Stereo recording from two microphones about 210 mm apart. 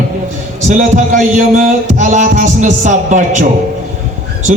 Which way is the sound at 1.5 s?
35° right (ahead or behind).